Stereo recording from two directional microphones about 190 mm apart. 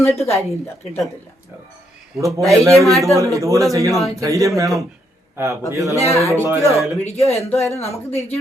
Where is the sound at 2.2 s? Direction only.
15° right (ahead or behind).